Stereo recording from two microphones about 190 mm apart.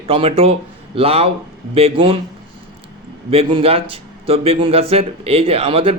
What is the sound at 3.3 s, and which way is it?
A man's voice, 30° right (ahead or behind).